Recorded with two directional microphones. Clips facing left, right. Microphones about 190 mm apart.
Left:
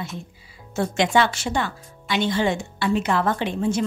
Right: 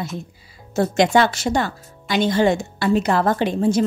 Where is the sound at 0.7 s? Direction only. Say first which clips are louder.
Right 4 dB; 40° right (ahead or behind).